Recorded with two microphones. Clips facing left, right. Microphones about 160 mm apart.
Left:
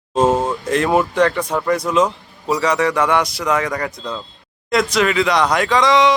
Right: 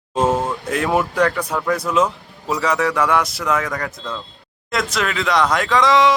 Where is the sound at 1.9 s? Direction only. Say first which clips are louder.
Left 2 dB; 5° right (ahead or behind).